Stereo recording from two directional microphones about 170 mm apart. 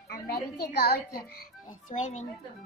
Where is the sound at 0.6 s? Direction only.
70° left (ahead or behind).